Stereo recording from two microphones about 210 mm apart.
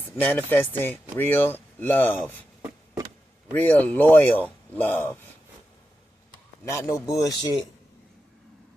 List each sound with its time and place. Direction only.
0.2 s speech: 10° left (ahead or behind)
3.5 s speech: 5° left (ahead or behind)
6.7 s speech: 15° left (ahead or behind)